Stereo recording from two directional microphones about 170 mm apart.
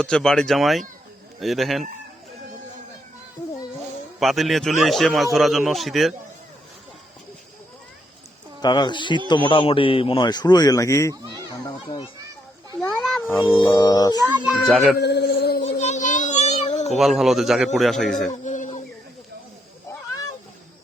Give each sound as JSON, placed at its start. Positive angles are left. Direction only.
{"t": 0.0, "sound": "a man's voice", "side_deg": 5}
{"t": 4.2, "sound": "a man's voice", "side_deg": 0}
{"t": 8.6, "sound": "a man's voice", "side_deg": 25}
{"t": 11.1, "sound": "speech", "side_deg": -20}
{"t": 11.9, "sound": "a man's voice", "side_deg": 20}
{"t": 12.9, "sound": "a sound", "side_deg": 0}
{"t": 13.7, "sound": "a man's voice", "side_deg": 25}
{"t": 14.5, "sound": "a man's voice", "side_deg": 0}
{"t": 14.9, "sound": "speech", "side_deg": 75}
{"t": 15.6, "sound": "children playing", "side_deg": 40}
{"t": 17.0, "sound": "a man's voice", "side_deg": 0}
{"t": 18.3, "sound": "a sound", "side_deg": 45}